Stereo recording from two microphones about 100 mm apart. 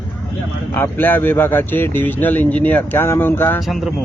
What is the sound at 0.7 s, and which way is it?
Speech, 20° left (ahead or behind).